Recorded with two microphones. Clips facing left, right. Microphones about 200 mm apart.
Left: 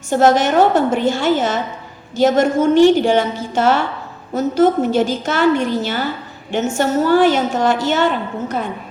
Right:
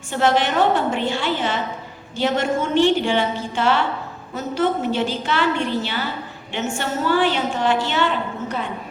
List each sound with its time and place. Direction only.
0.1 s a woman's voice: 40° left (ahead or behind)